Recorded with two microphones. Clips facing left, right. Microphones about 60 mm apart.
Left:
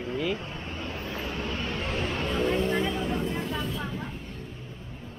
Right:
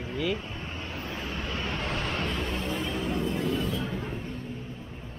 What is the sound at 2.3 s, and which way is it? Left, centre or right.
Speech, left.